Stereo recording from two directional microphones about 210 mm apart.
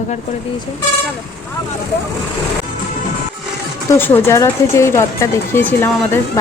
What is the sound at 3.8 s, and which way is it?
Speech, 10° left (ahead or behind).